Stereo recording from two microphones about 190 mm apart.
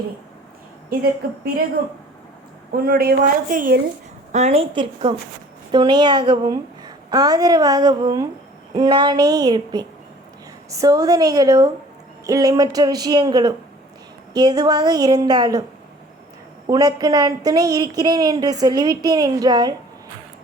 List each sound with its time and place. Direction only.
0.9 s a woman's voice: 50° right (ahead or behind)
2.7 s a woman's voice: 50° right (ahead or behind)
4.3 s a woman's voice: 35° right (ahead or behind)
16.6 s a woman's voice: 20° right (ahead or behind)